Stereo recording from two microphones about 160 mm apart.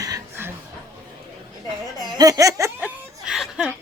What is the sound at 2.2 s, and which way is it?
Laughter, 20° right (ahead or behind).